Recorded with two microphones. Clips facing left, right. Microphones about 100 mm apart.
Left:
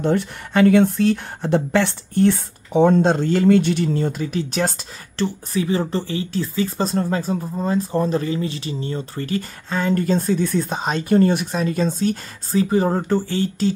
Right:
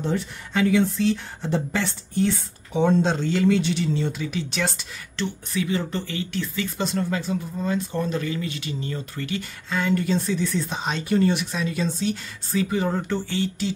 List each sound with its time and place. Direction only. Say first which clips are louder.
0.0 s speech: left 6 dB; 60° left (ahead or behind); by 13.7 s 45° left (ahead or behind)